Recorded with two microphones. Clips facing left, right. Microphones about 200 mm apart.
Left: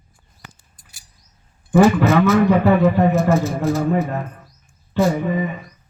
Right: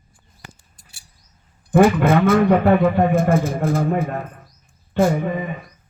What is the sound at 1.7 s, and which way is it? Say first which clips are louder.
A man's voice: left 1 dB; 55° right (ahead or behind).